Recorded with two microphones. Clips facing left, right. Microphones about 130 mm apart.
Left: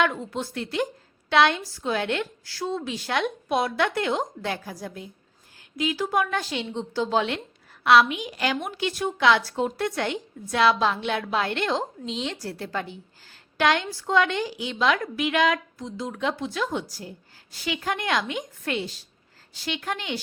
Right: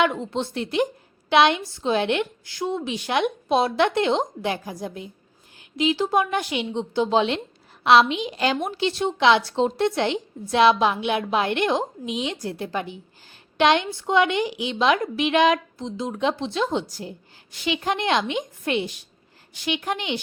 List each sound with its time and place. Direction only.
0.0 s a woman's voice: 20° right (ahead or behind)